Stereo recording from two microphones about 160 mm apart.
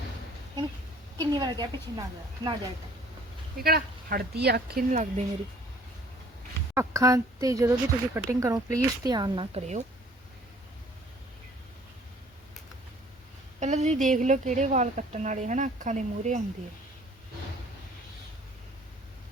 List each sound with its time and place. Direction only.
1.2 s speech: 25° right (ahead or behind)
3.6 s speech: 70° right (ahead or behind)
6.7 s speech: 20° right (ahead or behind); by 9.8 s 45° right (ahead or behind)
13.6 s a woman's voice: 45° right (ahead or behind)